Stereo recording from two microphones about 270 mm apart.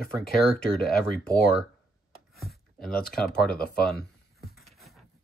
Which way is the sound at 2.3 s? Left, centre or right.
Centre.